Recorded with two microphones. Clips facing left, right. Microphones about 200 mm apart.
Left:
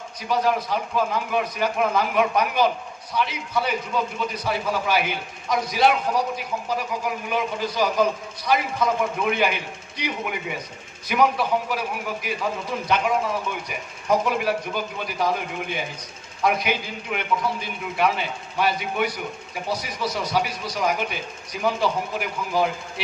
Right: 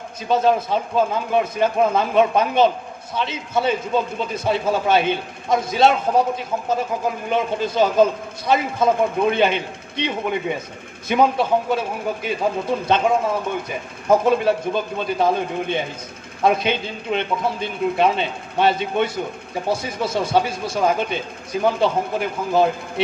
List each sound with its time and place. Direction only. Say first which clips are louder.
0.3 s a man's voice: right 5 dB; 25° right (ahead or behind)